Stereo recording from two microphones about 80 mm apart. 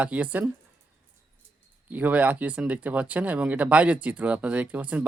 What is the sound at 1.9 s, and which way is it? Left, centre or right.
Speech, centre.